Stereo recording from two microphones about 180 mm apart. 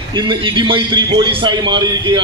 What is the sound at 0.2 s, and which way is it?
A man's voice, 25° right (ahead or behind).